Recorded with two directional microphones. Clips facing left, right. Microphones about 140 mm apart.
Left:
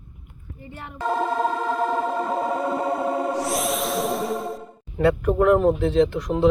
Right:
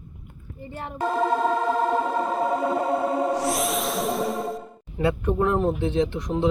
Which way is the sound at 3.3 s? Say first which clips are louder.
Even; centre (ahead or behind).